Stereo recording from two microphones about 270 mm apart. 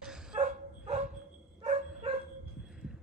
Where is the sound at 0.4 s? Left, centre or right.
Right.